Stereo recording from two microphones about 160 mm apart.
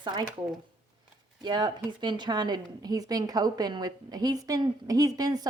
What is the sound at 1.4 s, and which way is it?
A woman's voice, 25° right (ahead or behind).